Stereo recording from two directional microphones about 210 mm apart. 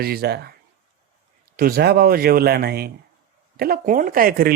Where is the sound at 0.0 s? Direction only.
45° right (ahead or behind).